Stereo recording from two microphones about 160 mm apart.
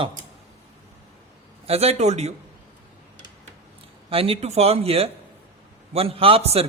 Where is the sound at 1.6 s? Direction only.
40° right (ahead or behind).